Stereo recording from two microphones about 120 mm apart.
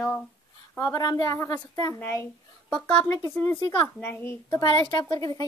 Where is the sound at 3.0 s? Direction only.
25° left (ahead or behind).